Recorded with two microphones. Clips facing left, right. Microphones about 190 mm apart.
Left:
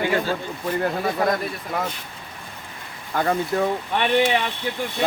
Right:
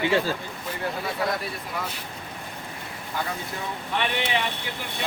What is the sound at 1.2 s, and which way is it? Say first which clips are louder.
Speech: left 5 dB; 45° left (ahead or behind).